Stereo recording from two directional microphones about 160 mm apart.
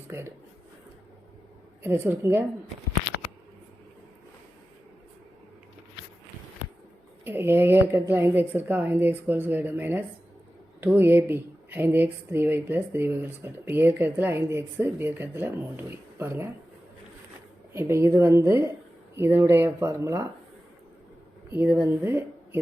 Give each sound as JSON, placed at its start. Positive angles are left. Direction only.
{"t": 0.1, "sound": "speech", "side_deg": -15}
{"t": 1.8, "sound": "speech", "side_deg": -15}
{"t": 7.3, "sound": "speech", "side_deg": -15}
{"t": 17.7, "sound": "speech", "side_deg": -15}
{"t": 21.5, "sound": "speech", "side_deg": -15}